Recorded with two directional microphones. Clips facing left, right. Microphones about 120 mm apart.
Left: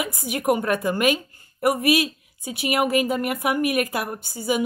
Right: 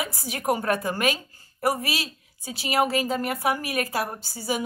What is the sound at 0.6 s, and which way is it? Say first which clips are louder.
Speech: left 3 dB; 35° right (ahead or behind).